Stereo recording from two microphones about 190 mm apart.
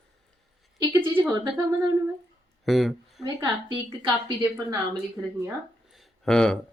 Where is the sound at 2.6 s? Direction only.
Centre (ahead or behind).